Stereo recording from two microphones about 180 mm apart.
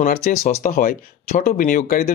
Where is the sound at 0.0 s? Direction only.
45° left (ahead or behind).